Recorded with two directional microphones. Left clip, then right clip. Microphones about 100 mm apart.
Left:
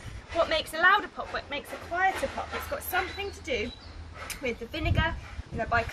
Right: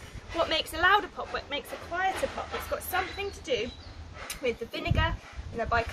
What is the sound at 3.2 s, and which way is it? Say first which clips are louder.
A woman's voice: right 1 dB; 20° right (ahead or behind).